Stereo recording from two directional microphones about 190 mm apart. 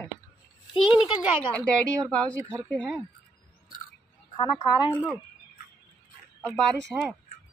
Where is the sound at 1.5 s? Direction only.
5° left (ahead or behind).